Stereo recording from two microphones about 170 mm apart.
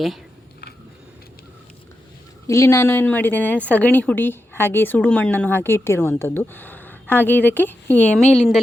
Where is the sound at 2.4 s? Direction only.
15° left (ahead or behind).